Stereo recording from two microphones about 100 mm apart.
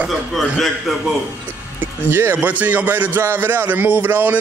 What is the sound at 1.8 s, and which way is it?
A man's voice, 20° right (ahead or behind).